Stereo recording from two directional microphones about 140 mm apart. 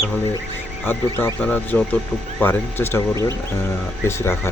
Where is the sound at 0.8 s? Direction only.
15° left (ahead or behind).